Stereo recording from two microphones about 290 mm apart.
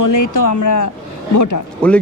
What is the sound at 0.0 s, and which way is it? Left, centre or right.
Speech, left.